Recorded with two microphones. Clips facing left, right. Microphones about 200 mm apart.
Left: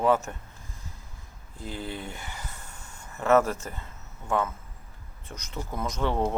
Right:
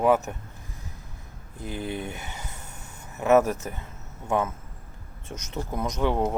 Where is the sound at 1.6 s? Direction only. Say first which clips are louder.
Right 4 dB; 20° right (ahead or behind).